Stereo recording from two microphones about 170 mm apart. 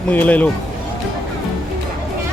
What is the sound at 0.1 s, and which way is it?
Speech, 10° left (ahead or behind).